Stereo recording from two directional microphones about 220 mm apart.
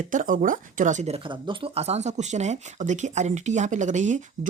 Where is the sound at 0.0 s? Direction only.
35° right (ahead or behind).